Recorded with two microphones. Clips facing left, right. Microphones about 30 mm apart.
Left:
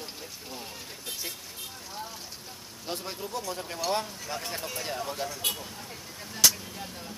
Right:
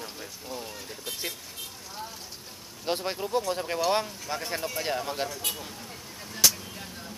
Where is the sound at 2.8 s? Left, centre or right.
Right.